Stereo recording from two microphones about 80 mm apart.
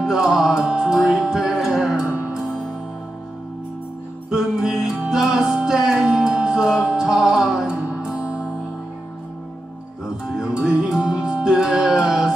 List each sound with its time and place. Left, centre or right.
0.0 s music: centre
4.3 s music: centre
10.2 s music: centre